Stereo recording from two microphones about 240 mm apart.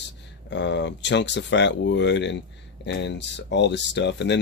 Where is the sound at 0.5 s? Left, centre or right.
Left.